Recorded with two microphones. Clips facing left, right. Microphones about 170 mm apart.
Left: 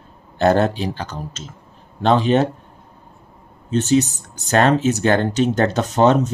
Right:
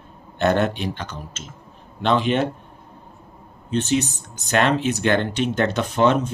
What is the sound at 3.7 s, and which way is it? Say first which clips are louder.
Speech: left 5 dB; 40° left (ahead or behind).